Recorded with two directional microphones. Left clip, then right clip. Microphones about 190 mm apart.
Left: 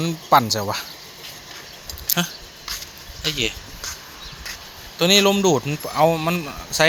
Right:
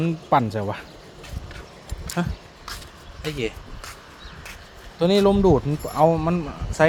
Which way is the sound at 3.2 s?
30° right (ahead or behind).